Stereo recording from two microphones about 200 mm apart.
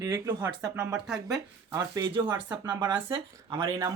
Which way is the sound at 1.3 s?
20° right (ahead or behind).